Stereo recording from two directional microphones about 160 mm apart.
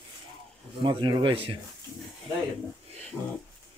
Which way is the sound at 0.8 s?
30° right (ahead or behind).